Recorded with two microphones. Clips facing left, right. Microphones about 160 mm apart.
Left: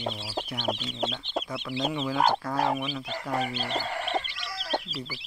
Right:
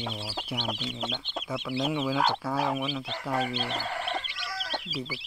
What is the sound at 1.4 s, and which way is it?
Speech, 5° right (ahead or behind).